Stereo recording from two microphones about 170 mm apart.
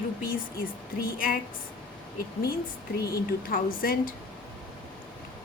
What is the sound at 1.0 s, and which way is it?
Speech, 55° left (ahead or behind).